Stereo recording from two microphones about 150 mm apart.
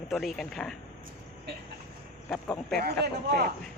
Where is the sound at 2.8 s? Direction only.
85° right.